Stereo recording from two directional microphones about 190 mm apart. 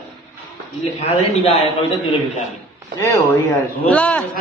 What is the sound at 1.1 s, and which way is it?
Speech, 30° left (ahead or behind).